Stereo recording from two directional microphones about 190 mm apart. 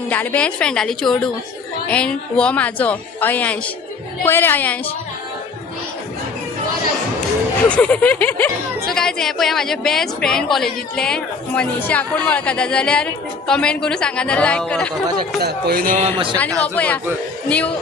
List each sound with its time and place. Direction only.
0.1 s a woman's voice: 10° left (ahead or behind)
7.7 s a woman's voice: 5° left (ahead or behind)
15.4 s speech: 55° right (ahead or behind)
16.0 s speech: 30° right (ahead or behind)
16.4 s speech: 5° left (ahead or behind)